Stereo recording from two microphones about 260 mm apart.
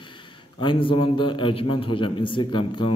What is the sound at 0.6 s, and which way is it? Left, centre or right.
A man's voice, centre.